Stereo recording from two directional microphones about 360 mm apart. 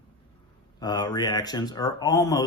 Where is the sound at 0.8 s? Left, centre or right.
Centre.